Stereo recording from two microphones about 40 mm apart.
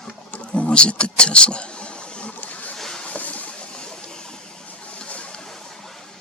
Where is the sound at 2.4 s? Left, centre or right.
Left.